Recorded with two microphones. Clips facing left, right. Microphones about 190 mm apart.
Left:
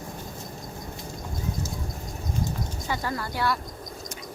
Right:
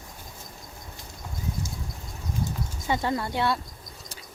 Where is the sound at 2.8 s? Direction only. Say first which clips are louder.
Right 5 dB; 25° right (ahead or behind).